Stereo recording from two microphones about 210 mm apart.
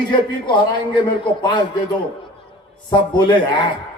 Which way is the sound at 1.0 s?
20° left (ahead or behind).